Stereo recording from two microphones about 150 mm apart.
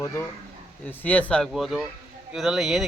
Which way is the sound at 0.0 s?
20° left (ahead or behind).